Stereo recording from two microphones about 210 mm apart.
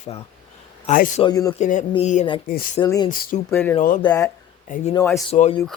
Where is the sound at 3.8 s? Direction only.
40° left (ahead or behind).